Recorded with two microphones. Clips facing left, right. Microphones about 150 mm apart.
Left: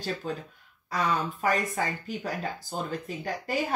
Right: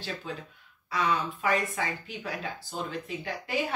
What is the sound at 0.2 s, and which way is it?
Speech, 45° left (ahead or behind).